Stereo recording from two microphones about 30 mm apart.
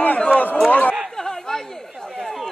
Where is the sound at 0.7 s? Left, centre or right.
Left.